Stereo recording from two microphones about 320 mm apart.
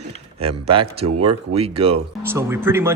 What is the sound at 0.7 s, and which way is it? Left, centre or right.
Speech, centre.